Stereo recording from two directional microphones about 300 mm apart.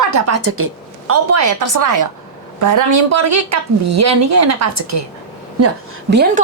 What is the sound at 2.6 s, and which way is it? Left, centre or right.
A woman's voice, right.